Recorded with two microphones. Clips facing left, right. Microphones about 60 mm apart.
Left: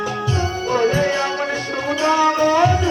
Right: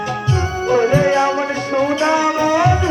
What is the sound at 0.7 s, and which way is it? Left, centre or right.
Music, centre.